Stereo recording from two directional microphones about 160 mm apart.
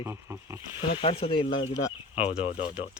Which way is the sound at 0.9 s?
35° left (ahead or behind).